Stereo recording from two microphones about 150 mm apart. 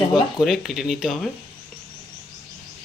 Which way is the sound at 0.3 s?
Centre (ahead or behind).